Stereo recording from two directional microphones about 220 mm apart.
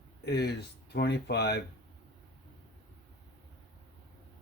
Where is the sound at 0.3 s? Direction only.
45° left (ahead or behind).